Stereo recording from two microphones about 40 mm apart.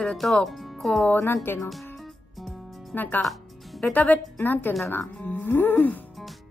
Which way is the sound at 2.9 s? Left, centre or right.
Left.